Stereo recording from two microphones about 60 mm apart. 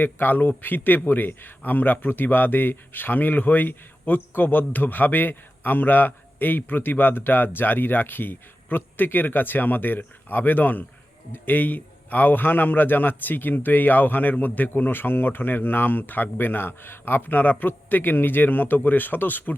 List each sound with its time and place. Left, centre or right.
0.0 s a man's voice: left